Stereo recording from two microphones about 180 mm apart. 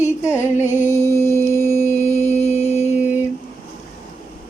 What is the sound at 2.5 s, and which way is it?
Mantra, 40° left (ahead or behind).